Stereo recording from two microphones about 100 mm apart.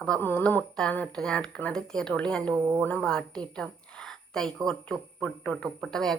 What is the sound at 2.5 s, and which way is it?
Speech, 30° right (ahead or behind).